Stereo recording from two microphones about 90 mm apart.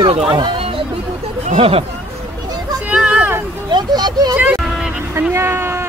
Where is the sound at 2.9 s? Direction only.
15° right (ahead or behind).